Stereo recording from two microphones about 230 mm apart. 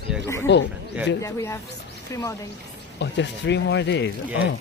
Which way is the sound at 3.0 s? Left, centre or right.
Left.